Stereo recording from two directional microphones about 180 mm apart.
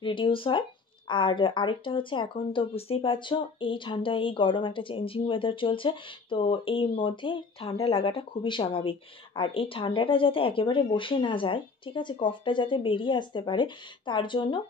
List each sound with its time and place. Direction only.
0.0 s speech: 25° left (ahead or behind)